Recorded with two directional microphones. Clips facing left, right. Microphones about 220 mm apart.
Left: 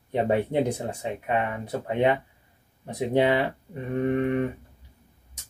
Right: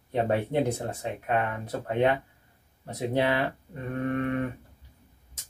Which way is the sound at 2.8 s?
15° left (ahead or behind).